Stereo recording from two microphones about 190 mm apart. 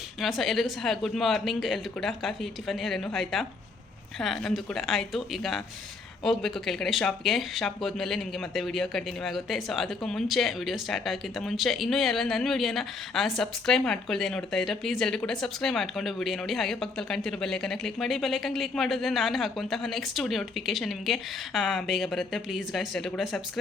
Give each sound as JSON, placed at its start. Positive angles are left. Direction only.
{"t": 0.2, "sound": "speech", "side_deg": 0}